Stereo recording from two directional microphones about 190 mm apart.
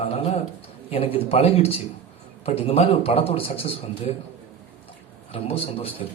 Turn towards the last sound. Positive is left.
turn(degrees=30)  # may be behind; listen again after turning